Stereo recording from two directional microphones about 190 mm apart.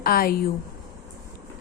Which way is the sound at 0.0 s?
50° left (ahead or behind).